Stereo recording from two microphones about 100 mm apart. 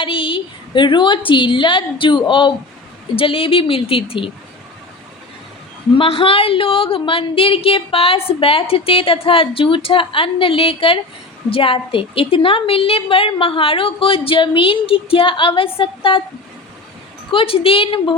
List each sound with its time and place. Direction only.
0.0 s a woman's voice: 60° left (ahead or behind)
6.0 s a woman's voice: 65° left (ahead or behind)
17.3 s a woman's voice: 65° left (ahead or behind)